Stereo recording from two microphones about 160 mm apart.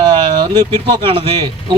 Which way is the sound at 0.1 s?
30° right (ahead or behind).